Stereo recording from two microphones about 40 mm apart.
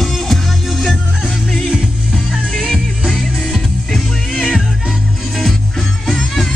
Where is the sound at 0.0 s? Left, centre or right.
Centre.